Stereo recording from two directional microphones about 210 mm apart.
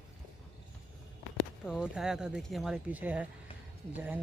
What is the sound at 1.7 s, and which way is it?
Speech, 5° right (ahead or behind).